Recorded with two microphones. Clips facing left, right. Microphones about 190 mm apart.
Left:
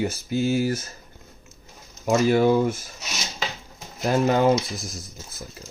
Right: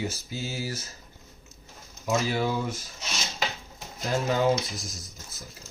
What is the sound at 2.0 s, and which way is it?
Speech, 50° left (ahead or behind).